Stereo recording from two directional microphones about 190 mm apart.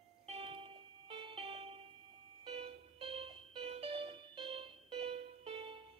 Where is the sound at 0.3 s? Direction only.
30° right (ahead or behind).